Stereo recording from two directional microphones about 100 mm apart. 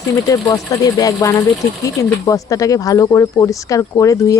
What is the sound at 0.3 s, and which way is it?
Speech, 35° left (ahead or behind).